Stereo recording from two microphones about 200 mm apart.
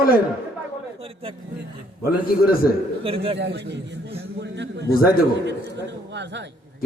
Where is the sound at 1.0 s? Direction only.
25° right (ahead or behind).